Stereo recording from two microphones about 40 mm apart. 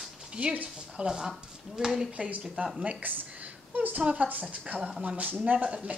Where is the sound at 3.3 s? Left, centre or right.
Right.